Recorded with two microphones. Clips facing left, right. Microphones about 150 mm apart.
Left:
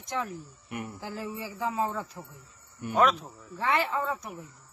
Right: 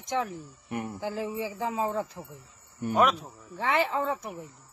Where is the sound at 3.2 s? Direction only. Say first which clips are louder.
Even; 20° right (ahead or behind).